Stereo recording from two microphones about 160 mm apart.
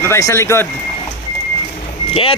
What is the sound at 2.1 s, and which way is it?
Speech, 35° left (ahead or behind).